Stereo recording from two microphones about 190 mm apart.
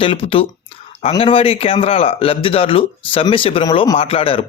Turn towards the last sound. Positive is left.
turn(degrees=30)  # may be behind; listen again after turning